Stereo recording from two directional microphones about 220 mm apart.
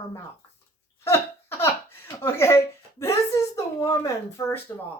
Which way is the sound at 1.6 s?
10° left (ahead or behind).